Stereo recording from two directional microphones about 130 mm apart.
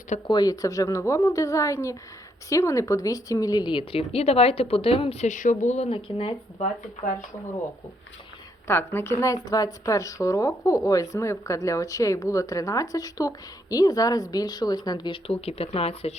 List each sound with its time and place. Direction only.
0.3 s a woman's voice: 30° left (ahead or behind); by 5.9 s 65° left (ahead or behind)
5.9 s a woman's voice: 45° left (ahead or behind)
8.6 s a woman's voice: 15° left (ahead or behind); by 15.2 s 35° left (ahead or behind)
15.3 s a woman's voice: 50° left (ahead or behind)